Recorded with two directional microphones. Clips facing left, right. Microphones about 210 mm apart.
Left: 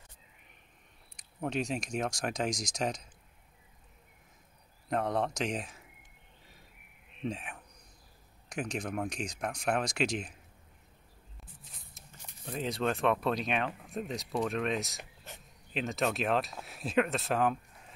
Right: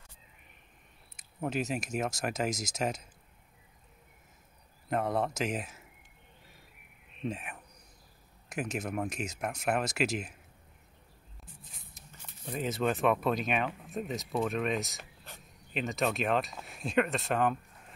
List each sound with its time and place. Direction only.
1.1 s speech: 5° right (ahead or behind)
4.8 s speech: 5° right (ahead or behind)
7.2 s speech: centre (ahead or behind)
12.4 s speech: 5° right (ahead or behind)
15.0 s insect: 20° left (ahead or behind)
15.7 s speech: centre (ahead or behind)